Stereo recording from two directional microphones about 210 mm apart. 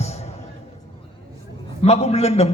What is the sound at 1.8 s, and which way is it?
Speech, 30° left (ahead or behind).